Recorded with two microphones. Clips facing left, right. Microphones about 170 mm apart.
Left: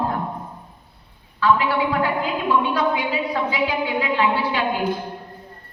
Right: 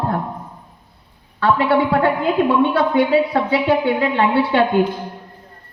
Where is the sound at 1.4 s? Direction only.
60° right (ahead or behind).